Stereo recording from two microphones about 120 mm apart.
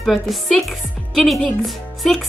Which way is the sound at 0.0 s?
Centre (ahead or behind).